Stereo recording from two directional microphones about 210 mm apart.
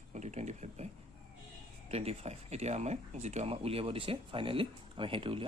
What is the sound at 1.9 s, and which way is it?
Speech, 30° right (ahead or behind).